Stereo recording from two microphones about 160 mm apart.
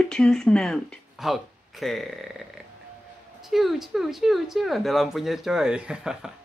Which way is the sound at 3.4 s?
Centre (ahead or behind).